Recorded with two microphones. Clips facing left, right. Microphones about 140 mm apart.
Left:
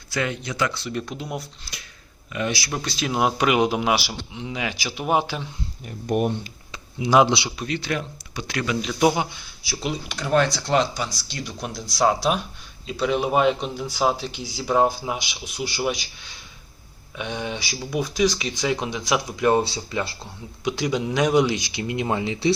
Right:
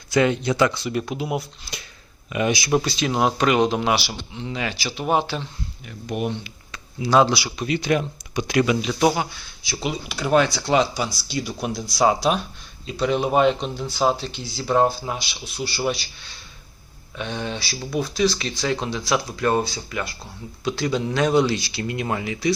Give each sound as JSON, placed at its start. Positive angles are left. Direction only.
{"t": 0.1, "sound": "speech", "side_deg": -25}
{"t": 0.7, "sound": "speech", "side_deg": -15}
{"t": 1.7, "sound": "a sound", "side_deg": -20}
{"t": 2.3, "sound": "speech", "side_deg": -15}
{"t": 2.8, "sound": "speech", "side_deg": 0}
{"t": 5.8, "sound": "speech", "side_deg": 45}
{"t": 7.1, "sound": "speech", "side_deg": 15}
{"t": 7.7, "sound": "speech", "side_deg": -15}
{"t": 9.0, "sound": "speech", "side_deg": 15}
{"t": 9.6, "sound": "speech", "side_deg": 0}
{"t": 17.2, "sound": "speech", "side_deg": 10}
{"t": 19.6, "sound": "speech", "side_deg": 25}
{"t": 20.7, "sound": "speech", "side_deg": 15}